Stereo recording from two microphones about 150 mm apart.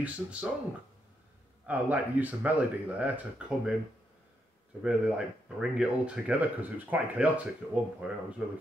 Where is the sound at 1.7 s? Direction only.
10° right (ahead or behind).